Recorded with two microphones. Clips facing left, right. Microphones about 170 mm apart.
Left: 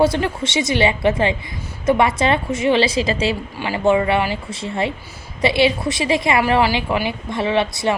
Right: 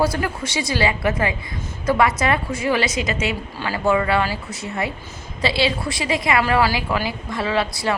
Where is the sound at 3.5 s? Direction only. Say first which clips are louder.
Left 3 dB; 20° left (ahead or behind).